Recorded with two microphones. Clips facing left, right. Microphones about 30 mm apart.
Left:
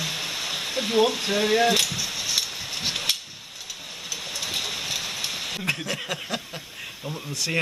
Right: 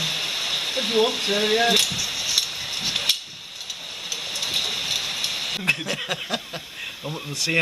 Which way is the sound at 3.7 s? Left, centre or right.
Centre.